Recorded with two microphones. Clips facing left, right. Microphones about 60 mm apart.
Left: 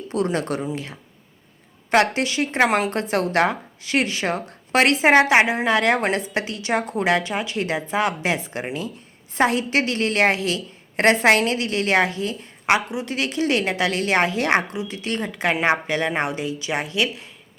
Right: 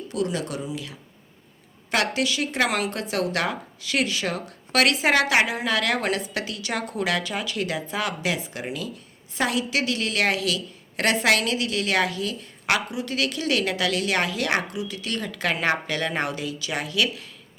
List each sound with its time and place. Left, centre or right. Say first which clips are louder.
0.1 s a woman's voice: left 5 dB; left